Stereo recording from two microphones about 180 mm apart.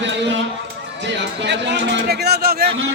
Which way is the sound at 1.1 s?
75° right (ahead or behind).